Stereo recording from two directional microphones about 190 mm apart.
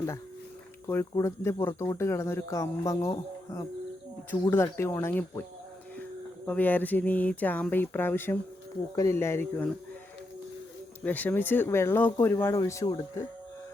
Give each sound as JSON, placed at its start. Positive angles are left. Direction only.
{"t": 0.9, "sound": "speech", "side_deg": 15}
{"t": 11.0, "sound": "speech", "side_deg": 10}